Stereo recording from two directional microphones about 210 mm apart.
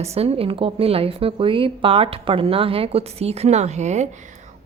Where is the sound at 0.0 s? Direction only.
30° right (ahead or behind).